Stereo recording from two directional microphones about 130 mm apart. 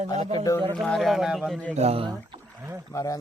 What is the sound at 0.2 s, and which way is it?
Speech, 50° right (ahead or behind).